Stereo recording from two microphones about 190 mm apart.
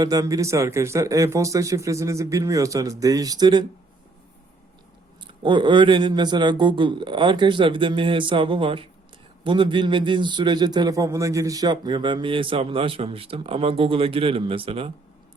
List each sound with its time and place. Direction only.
0.0 s speech: 20° right (ahead or behind)
5.2 s a man's voice: 25° right (ahead or behind)